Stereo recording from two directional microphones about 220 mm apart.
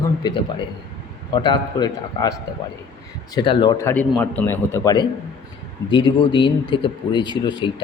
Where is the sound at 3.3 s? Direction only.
20° left (ahead or behind).